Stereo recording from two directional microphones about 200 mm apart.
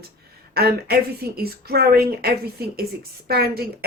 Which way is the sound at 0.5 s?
50° right (ahead or behind).